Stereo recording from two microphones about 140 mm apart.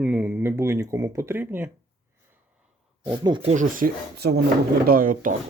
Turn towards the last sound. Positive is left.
turn(degrees=-75)  # may be behind; listen again after turning